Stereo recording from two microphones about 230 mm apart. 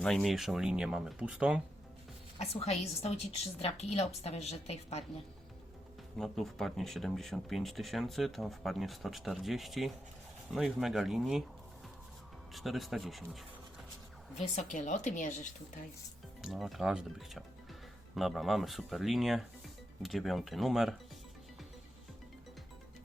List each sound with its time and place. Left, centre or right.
0.0 s speech: centre
2.4 s a woman's voice: left
6.1 s speech: centre
12.5 s speech: centre
14.3 s a woman's voice: left
16.4 s speech: centre